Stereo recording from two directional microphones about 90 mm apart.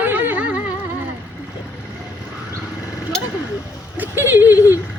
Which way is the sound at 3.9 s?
20° right (ahead or behind).